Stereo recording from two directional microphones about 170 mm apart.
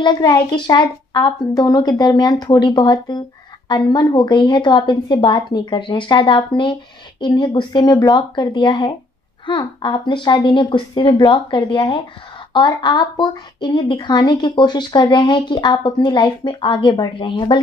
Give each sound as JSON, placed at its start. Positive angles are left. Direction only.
{"t": 0.0, "sound": "a child's voice", "side_deg": 25}